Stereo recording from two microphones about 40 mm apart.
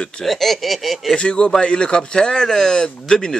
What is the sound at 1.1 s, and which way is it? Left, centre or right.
Speech, left.